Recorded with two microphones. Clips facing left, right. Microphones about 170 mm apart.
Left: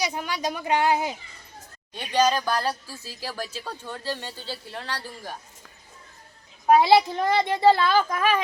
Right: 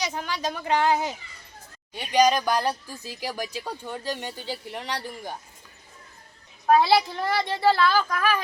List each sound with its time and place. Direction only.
0.0 s speech: 15° left (ahead or behind)
1.9 s speech: 15° right (ahead or behind)
6.7 s speech: 20° left (ahead or behind)